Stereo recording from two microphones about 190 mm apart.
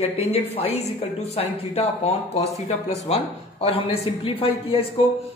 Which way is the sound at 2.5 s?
15° right (ahead or behind).